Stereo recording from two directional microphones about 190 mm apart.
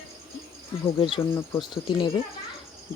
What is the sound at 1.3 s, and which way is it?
Speech, 25° left (ahead or behind).